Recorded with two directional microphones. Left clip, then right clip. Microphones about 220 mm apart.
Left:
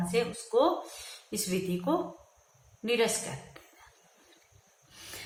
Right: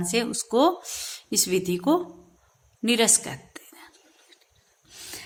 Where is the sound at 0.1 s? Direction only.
50° right (ahead or behind).